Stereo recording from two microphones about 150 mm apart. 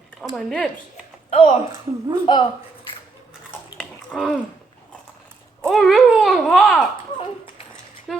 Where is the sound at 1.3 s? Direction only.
40° left (ahead or behind).